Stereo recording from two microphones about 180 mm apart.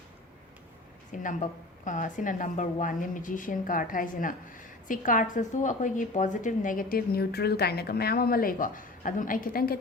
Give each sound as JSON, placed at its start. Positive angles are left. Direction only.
{"t": 1.1, "sound": "a woman's voice", "side_deg": 45}